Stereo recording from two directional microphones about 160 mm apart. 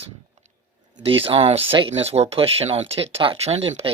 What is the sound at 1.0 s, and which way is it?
Speech, 35° right (ahead or behind).